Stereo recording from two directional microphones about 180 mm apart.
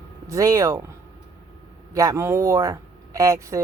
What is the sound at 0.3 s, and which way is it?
Speech, 20° right (ahead or behind).